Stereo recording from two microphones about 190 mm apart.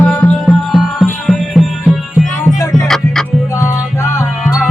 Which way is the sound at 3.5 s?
15° left (ahead or behind).